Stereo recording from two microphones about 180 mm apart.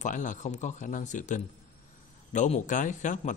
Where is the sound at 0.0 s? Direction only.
45° left (ahead or behind).